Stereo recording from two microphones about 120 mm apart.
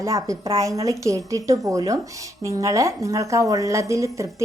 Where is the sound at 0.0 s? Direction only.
25° right (ahead or behind).